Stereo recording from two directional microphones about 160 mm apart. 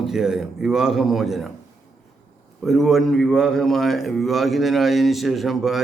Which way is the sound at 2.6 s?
Centre (ahead or behind).